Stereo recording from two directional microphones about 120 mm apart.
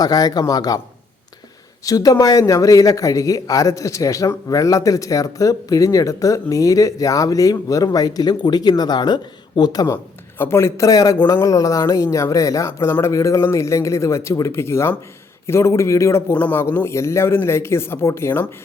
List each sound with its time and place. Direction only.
0.0 s a man's voice: 35° left (ahead or behind)
1.8 s a man's voice: 30° left (ahead or behind)